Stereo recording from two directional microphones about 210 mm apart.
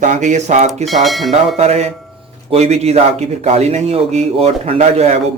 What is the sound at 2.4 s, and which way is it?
Speech, 30° right (ahead or behind).